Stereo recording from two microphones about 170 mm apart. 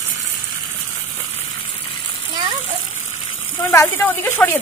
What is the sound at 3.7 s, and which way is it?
Speech, 15° left (ahead or behind).